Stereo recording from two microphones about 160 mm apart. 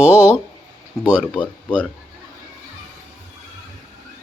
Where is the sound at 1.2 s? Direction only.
10° left (ahead or behind).